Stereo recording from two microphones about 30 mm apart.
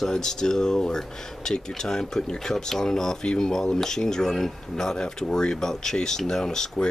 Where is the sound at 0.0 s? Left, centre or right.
Centre.